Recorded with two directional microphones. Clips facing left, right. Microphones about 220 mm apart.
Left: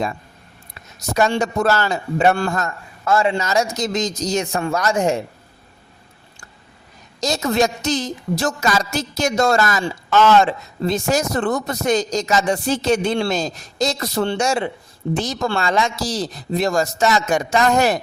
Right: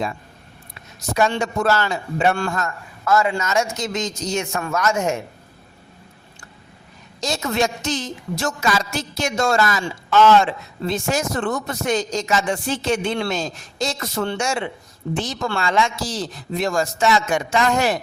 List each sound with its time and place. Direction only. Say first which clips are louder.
0.9 s a woman's voice: left 2 dB; 40° left (ahead or behind)
7.2 s a woman's voice: left 3 dB; 40° left (ahead or behind)